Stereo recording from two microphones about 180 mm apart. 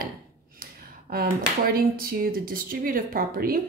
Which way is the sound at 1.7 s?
55° right (ahead or behind).